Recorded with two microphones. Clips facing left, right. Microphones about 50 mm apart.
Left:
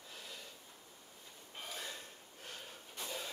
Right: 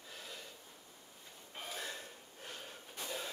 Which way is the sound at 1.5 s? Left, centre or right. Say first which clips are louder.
Right 2 dB; centre.